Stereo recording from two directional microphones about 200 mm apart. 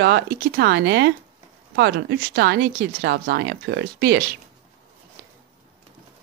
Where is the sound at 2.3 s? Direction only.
55° right (ahead or behind).